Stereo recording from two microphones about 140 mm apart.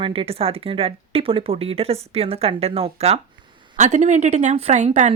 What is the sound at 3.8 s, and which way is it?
A woman's voice, 55° right (ahead or behind).